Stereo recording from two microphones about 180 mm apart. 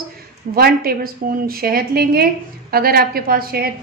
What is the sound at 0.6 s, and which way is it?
A woman's voice, 55° right (ahead or behind).